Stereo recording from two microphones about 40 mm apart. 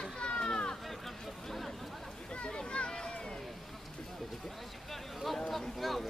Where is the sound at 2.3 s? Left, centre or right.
Left.